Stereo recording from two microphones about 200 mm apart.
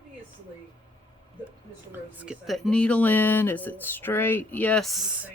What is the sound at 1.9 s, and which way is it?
Speech, 5° right (ahead or behind).